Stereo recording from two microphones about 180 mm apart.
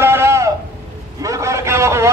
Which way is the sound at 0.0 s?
15° right (ahead or behind).